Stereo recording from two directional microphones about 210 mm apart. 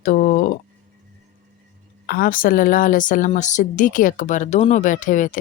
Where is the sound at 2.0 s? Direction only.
45° left (ahead or behind).